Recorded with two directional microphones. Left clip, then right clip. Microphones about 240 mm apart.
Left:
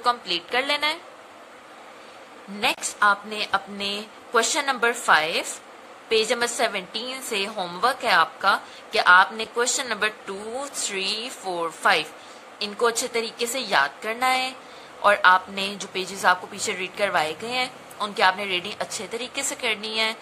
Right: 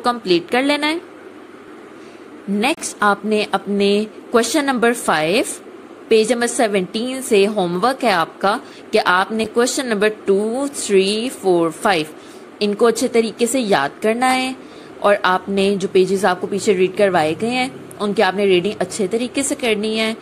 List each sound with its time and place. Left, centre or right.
0.0 s a woman's voice: centre
2.6 s a woman's voice: right